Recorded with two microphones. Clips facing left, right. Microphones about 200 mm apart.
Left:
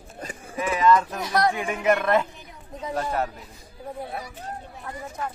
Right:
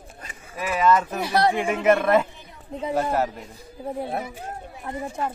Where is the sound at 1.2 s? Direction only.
30° right (ahead or behind).